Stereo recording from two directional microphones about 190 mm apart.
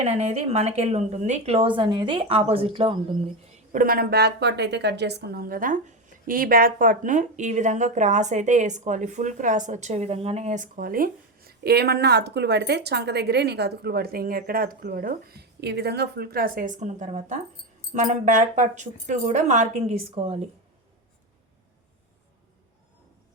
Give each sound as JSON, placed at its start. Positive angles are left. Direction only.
{"t": 0.0, "sound": "a woman's voice", "side_deg": -35}
{"t": 3.7, "sound": "a woman's voice", "side_deg": -45}